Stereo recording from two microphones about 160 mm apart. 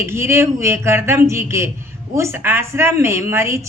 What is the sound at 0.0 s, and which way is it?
Speech, 15° right (ahead or behind).